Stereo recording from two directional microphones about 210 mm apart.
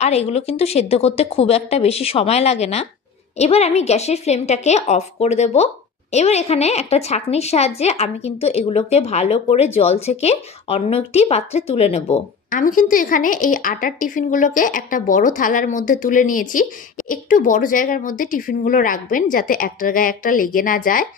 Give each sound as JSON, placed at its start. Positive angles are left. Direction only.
{"t": 0.0, "sound": "a woman's voice", "side_deg": 30}